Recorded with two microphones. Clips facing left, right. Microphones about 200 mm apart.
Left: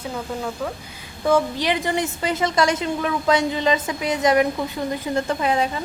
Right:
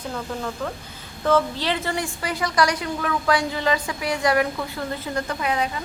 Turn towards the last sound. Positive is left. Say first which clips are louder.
# left 4 dB
turn(degrees=30)  # may be behind; listen again after turning